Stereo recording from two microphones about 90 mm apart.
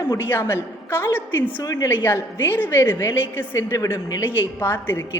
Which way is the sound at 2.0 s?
25° left (ahead or behind).